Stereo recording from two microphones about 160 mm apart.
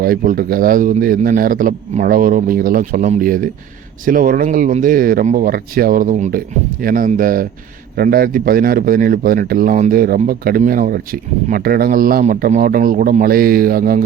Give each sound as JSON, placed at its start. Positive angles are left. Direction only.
{"t": 0.0, "sound": "speech", "side_deg": -65}
{"t": 12.2, "sound": "speech", "side_deg": -50}